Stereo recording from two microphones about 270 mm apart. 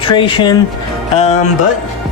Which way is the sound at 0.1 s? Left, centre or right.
Centre.